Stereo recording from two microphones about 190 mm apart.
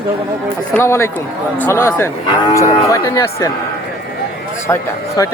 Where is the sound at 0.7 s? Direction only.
15° left (ahead or behind).